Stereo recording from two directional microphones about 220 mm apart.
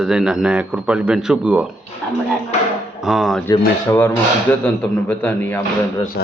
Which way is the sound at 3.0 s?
Centre (ahead or behind).